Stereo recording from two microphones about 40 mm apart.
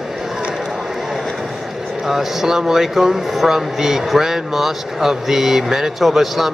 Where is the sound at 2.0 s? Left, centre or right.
Centre.